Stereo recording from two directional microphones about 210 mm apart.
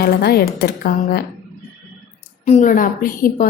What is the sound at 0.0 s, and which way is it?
A woman's voice, 50° left (ahead or behind).